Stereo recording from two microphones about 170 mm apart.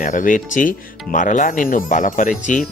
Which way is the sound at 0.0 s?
50° left (ahead or behind).